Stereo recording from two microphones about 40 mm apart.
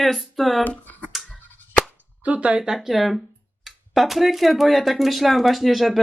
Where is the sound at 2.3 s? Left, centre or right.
Right.